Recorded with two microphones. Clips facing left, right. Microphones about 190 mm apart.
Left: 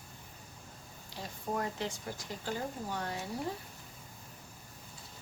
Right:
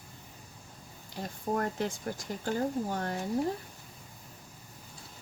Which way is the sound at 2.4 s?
50° right (ahead or behind).